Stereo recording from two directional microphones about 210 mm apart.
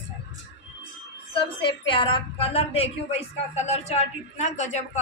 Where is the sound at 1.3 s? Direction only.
25° left (ahead or behind).